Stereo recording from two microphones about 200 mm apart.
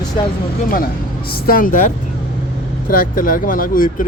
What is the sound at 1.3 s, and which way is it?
Speech, 50° left (ahead or behind).